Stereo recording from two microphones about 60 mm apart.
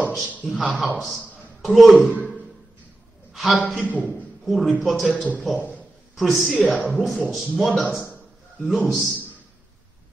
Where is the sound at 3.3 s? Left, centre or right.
Centre.